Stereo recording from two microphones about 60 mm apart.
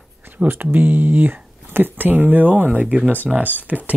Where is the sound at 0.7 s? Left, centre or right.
Right.